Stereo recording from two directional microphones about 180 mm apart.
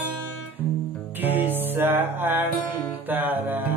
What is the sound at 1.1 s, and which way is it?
Music, 10° right (ahead or behind).